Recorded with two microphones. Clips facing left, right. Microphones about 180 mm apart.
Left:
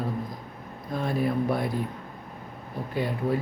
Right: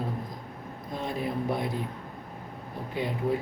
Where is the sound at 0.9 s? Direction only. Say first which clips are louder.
Left 5 dB; 20° right (ahead or behind).